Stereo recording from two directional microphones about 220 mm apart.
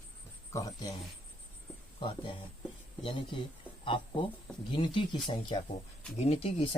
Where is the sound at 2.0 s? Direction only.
20° left (ahead or behind).